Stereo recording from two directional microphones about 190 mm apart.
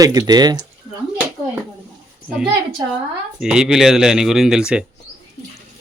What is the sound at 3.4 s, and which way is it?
Speech, 5° right (ahead or behind).